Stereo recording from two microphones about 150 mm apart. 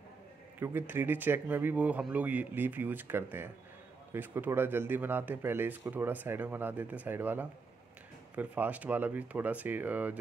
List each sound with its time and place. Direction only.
0.6 s speech: 15° right (ahead or behind)